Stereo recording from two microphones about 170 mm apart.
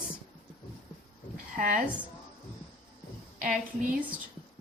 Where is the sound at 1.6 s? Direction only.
50° right (ahead or behind).